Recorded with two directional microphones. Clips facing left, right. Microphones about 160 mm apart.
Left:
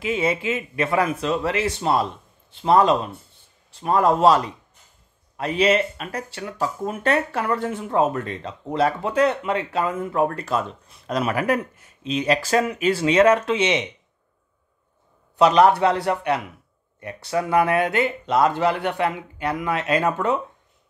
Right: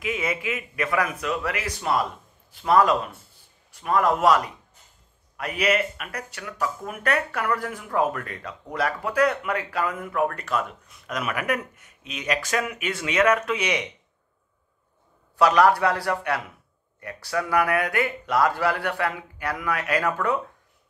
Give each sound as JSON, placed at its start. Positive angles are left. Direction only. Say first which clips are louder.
{"t": 0.0, "sound": "speech", "louder": "left 5 dB", "side_deg": 30}
{"t": 15.3, "sound": "speech", "louder": "left 3 dB", "side_deg": 20}